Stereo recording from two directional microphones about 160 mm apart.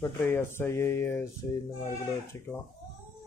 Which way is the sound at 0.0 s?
15° left (ahead or behind).